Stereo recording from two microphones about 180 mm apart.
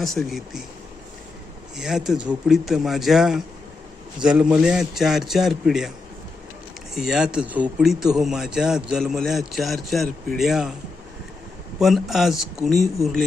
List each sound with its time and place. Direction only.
0.0 s a man's voice: centre (ahead or behind)
1.7 s a man's voice: 5° right (ahead or behind)
6.9 s a man's voice: centre (ahead or behind)
11.8 s a man's voice: centre (ahead or behind)